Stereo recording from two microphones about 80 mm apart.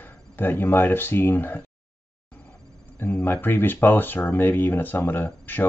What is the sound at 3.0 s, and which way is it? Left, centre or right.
Speech, left.